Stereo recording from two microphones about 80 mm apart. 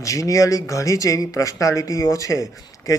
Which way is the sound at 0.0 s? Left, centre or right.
Left.